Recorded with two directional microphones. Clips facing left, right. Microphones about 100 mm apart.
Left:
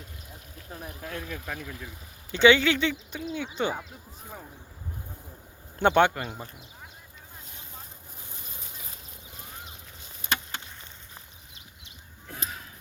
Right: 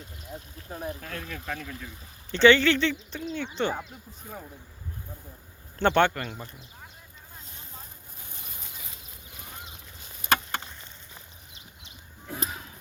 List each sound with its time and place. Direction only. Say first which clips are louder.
0.7 s speech: right 6 dB; 30° right (ahead or behind)
1.0 s speech: even; 10° left (ahead or behind)
5.8 s speech: left 1 dB; 10° left (ahead or behind)
10.2 s chop: right 6 dB; 55° right (ahead or behind)